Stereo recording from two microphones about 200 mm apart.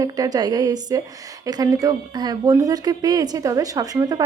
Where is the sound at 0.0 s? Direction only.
20° right (ahead or behind).